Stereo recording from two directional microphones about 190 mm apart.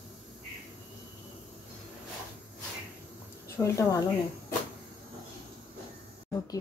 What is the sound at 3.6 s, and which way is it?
Speech, 15° left (ahead or behind).